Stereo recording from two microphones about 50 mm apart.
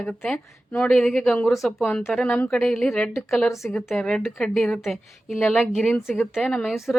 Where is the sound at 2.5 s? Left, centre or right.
Centre.